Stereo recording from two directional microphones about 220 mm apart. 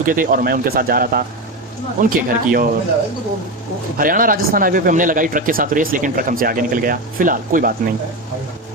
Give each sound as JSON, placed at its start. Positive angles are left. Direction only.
{"t": 0.0, "sound": "speech", "side_deg": -40}
{"t": 3.9, "sound": "speech", "side_deg": -40}